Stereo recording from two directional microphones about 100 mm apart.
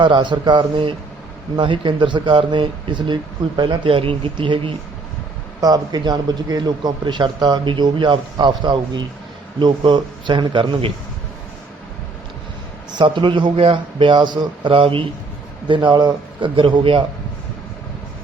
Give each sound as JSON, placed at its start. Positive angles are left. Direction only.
{"t": 0.0, "sound": "a man's voice", "side_deg": -50}
{"t": 5.5, "sound": "a man's voice", "side_deg": -40}
{"t": 13.0, "sound": "a man's voice", "side_deg": -55}
{"t": 15.6, "sound": "a man's voice", "side_deg": -50}